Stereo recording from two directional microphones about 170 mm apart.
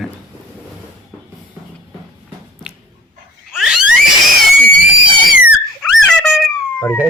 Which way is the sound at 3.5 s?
5° right (ahead or behind).